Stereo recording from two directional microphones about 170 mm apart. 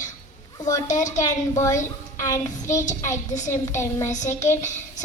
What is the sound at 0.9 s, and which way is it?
Child singing, 45° left (ahead or behind).